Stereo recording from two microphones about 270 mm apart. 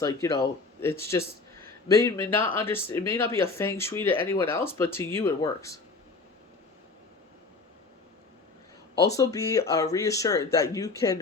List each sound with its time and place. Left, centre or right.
0.0 s speech: centre
1.6 s a sound: centre
2.3 s speech: centre
9.0 s speech: centre